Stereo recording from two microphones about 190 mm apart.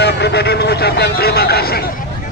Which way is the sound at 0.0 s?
60° left (ahead or behind).